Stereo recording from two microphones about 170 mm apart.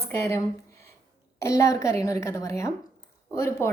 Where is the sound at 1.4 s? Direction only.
20° left (ahead or behind).